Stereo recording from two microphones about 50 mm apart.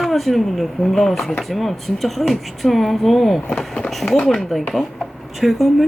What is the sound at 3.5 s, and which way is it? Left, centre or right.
Speech, left.